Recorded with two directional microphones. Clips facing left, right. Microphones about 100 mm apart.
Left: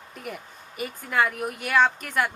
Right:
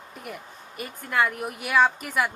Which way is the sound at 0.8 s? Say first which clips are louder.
Even; centre (ahead or behind).